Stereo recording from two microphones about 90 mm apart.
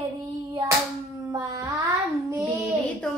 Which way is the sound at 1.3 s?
35° right (ahead or behind).